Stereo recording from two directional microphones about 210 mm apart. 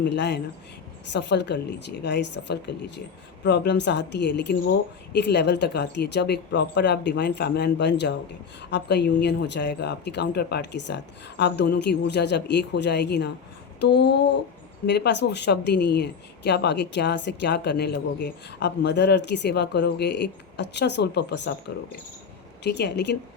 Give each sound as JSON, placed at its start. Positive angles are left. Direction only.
{"t": 0.0, "sound": "speech", "side_deg": 55}
{"t": 13.7, "sound": "a sound", "side_deg": 55}
{"t": 14.8, "sound": "speech", "side_deg": 55}
{"t": 22.6, "sound": "speech", "side_deg": 55}